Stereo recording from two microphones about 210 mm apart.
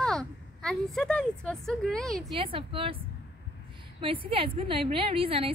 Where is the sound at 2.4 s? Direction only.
25° right (ahead or behind).